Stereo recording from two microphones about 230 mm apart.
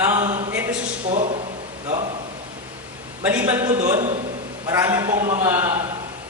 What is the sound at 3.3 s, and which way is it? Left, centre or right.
A man's voice, centre.